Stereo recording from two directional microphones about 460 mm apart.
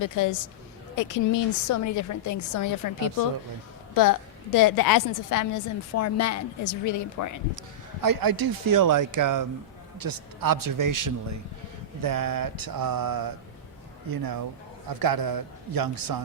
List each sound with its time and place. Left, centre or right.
0.0 s a woman's voice: left
4.5 s a woman's voice: left
8.0 s speech: right